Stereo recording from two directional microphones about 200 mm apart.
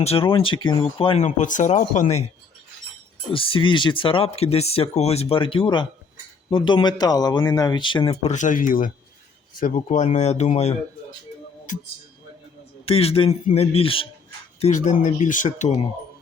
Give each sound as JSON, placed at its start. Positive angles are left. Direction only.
{"t": 0.0, "sound": "speech", "side_deg": 30}
{"t": 3.3, "sound": "speech", "side_deg": 25}
{"t": 8.2, "sound": "speech", "side_deg": 35}
{"t": 12.8, "sound": "speech", "side_deg": 30}